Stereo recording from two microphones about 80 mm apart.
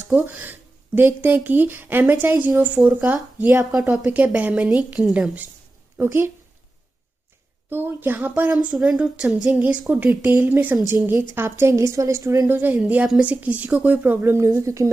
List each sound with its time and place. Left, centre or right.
0.1 s speech: right
5.9 s speech: right
7.7 s speech: right; by 9.6 s centre
9.6 s a woman's voice: centre; by 12.4 s right
12.4 s speech: right
14.6 s a woman's voice: right